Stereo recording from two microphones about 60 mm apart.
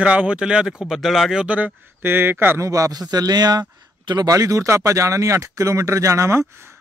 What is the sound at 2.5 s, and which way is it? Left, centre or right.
A man's voice, right.